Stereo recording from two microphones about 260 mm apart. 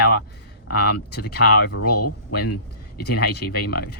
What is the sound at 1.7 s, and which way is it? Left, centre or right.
A man's voice, left.